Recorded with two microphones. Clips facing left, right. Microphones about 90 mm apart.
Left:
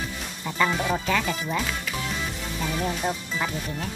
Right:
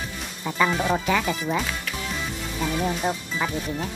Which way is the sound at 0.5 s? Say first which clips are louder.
Right 2 dB; 5° right (ahead or behind).